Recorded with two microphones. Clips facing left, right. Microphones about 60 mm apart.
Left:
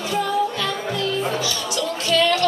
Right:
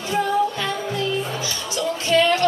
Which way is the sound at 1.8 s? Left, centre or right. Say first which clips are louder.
Right 2 dB; right.